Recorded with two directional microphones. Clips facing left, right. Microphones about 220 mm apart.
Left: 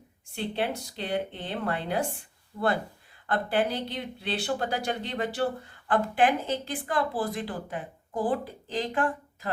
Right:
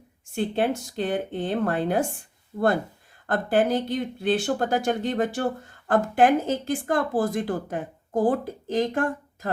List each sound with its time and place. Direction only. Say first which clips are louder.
0.3 s speech: right 6 dB; 50° right (ahead or behind)